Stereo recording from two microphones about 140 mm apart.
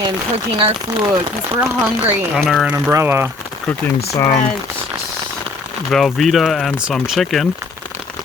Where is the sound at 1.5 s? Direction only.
15° right (ahead or behind).